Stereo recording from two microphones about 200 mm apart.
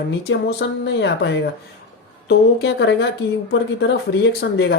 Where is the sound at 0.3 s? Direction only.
60° left (ahead or behind).